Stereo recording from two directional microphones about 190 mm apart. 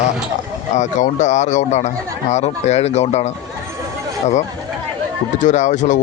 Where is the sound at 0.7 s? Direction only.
40° left (ahead or behind).